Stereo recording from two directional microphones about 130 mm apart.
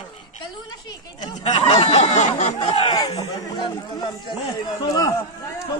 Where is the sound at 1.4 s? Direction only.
55° left (ahead or behind).